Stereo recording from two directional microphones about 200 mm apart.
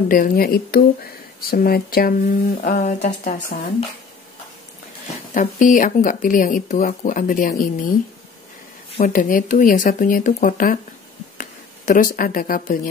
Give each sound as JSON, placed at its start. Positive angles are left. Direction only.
{"t": 0.1, "sound": "speech", "side_deg": 45}
{"t": 5.3, "sound": "speech", "side_deg": 40}
{"t": 9.0, "sound": "speech", "side_deg": 45}